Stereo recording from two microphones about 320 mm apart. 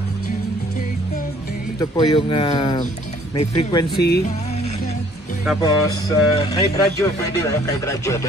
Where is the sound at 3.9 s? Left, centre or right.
Left.